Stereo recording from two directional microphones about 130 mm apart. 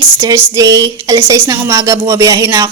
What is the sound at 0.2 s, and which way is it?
Speech, 25° right (ahead or behind).